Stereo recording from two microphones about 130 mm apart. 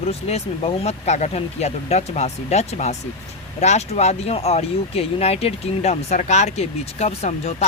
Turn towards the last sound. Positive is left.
turn(degrees=60)  # may be behind; listen again after turning